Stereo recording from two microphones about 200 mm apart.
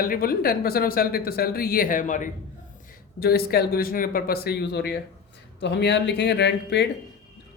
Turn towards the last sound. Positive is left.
turn(degrees=60)  # may be behind; listen again after turning